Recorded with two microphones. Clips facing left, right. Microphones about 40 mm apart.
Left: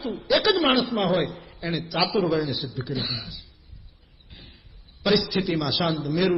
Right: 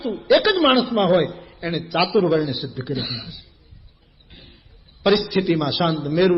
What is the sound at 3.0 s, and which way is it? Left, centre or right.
Speech, right.